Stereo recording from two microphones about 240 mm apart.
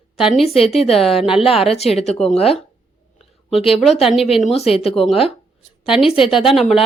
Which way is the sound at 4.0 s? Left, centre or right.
Centre.